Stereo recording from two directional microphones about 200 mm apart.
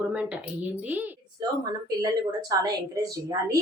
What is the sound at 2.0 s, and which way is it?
Speech, 20° right (ahead or behind).